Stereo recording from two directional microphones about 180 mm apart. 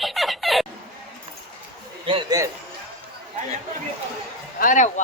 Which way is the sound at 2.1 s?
25° right (ahead or behind).